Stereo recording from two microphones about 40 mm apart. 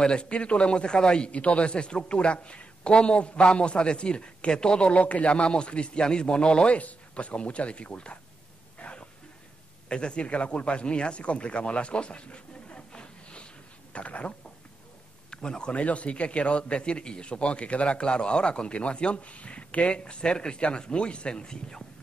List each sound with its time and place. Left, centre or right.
0.0 s a man's voice: left
6.8 s speech: left
8.7 s a sound: left
9.8 s speech: left
15.3 s a man's voice: centre